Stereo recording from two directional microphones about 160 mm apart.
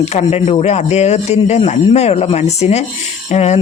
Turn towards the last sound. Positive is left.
turn(degrees=45)  # may be behind; listen again after turning